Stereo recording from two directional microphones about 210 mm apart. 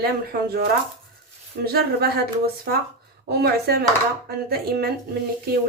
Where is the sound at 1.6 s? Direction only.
45° right (ahead or behind).